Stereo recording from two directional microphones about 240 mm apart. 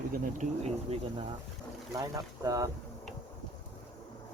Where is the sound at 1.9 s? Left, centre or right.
Centre.